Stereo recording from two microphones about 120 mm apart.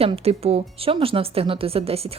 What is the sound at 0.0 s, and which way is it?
Speech, 55° right (ahead or behind).